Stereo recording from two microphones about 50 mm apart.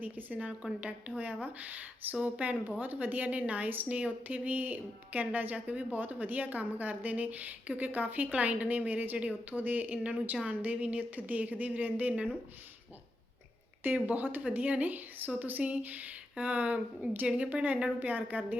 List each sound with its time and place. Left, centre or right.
0.0 s a woman's voice: right
9.9 s a woman's voice: right
13.8 s a woman's voice: right